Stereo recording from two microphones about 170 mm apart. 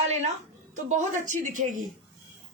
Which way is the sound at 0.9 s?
45° right (ahead or behind).